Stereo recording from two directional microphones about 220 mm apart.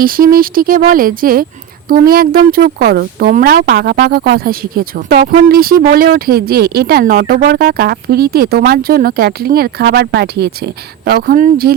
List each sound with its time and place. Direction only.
0.0 s speech: 40° right (ahead or behind)